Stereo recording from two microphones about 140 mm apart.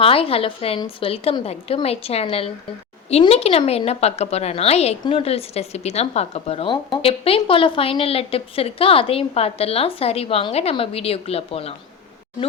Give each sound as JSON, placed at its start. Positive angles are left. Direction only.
{"t": 0.0, "sound": "a woman's voice", "side_deg": 40}